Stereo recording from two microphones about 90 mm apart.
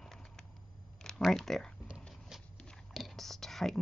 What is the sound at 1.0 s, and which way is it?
Speech, 5° left (ahead or behind).